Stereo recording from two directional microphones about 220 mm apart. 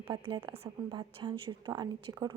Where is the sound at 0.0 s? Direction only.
25° right (ahead or behind).